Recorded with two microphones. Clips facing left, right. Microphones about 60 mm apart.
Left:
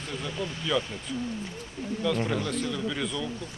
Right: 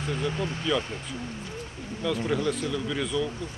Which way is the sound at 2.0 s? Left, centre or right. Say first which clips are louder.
Right 2 dB; centre.